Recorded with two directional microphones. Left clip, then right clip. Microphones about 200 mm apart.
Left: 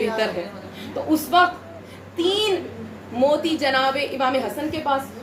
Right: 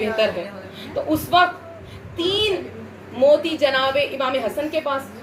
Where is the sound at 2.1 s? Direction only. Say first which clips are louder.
Even; 15° left (ahead or behind).